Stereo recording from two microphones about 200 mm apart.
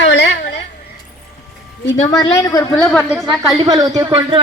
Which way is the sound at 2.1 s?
20° left (ahead or behind).